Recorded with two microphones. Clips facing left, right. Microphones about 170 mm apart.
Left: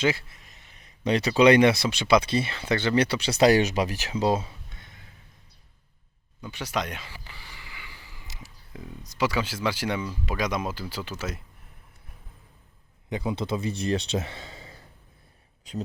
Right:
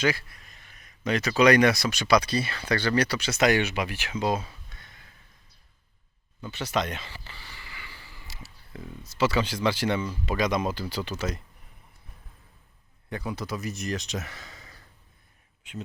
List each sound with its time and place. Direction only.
0.0 s speech: 25° left (ahead or behind)
6.4 s a sound: 10° left (ahead or behind)
9.0 s speech: 10° left (ahead or behind)
13.1 s speech: 20° left (ahead or behind); by 15.8 s 35° left (ahead or behind)